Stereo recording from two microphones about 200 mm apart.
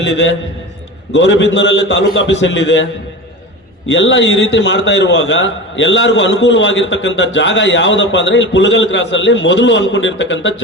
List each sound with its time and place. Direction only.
0.0 s a man's voice: 65° left (ahead or behind)
3.8 s a man's voice: 65° left (ahead or behind)